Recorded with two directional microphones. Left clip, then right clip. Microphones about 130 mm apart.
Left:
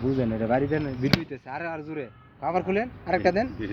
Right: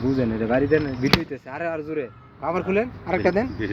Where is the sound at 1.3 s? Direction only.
60° left (ahead or behind); by 3.2 s 80° left.